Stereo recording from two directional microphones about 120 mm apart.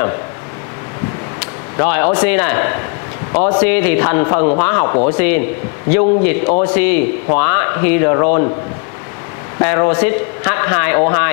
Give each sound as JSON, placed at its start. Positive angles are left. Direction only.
{"t": 1.8, "sound": "speech", "side_deg": 20}
{"t": 9.6, "sound": "speech", "side_deg": 25}